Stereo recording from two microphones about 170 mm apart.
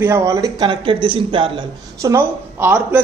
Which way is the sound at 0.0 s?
15° right (ahead or behind).